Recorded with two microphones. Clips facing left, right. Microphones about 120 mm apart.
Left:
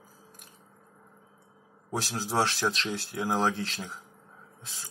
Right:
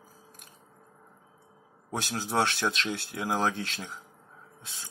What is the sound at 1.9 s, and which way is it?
Speech, centre (ahead or behind).